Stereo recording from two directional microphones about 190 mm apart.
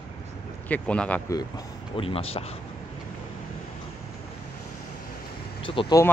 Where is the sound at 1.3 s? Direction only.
20° left (ahead or behind).